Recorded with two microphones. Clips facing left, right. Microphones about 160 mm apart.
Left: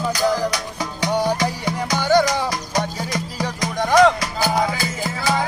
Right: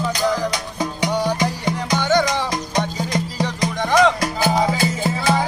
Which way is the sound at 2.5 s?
20° right (ahead or behind).